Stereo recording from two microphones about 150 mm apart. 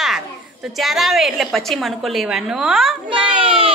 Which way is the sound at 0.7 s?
Centre (ahead or behind).